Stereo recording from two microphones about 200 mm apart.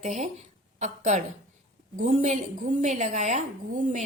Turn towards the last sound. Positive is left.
turn(degrees=-35)  # may be behind; listen again after turning